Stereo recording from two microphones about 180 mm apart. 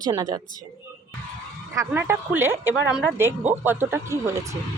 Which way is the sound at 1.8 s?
10° right (ahead or behind).